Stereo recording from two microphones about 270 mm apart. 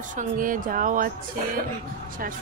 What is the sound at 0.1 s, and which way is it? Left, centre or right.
Speech, right.